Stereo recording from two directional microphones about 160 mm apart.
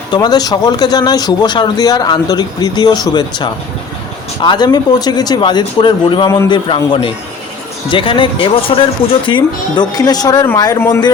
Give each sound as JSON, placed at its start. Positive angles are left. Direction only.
{"t": 0.1, "sound": "a man's voice", "side_deg": 25}